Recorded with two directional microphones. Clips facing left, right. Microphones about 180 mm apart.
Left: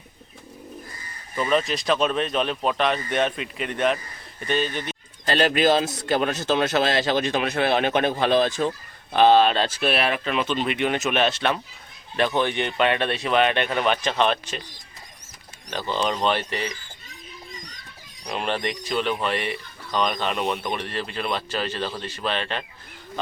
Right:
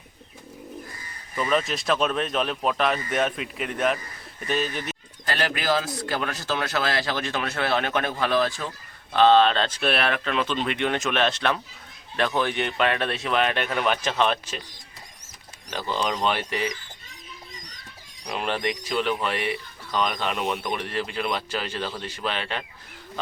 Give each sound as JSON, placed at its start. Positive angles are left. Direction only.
{"t": 1.4, "sound": "speech", "side_deg": 0}
{"t": 5.2, "sound": "a man's voice", "side_deg": 25}
{"t": 15.7, "sound": "speech", "side_deg": -5}
{"t": 18.3, "sound": "speech", "side_deg": -5}